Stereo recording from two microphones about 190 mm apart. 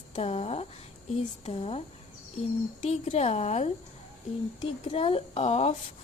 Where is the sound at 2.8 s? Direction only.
35° left (ahead or behind).